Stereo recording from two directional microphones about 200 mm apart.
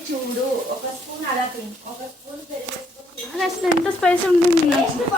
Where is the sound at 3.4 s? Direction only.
Centre (ahead or behind).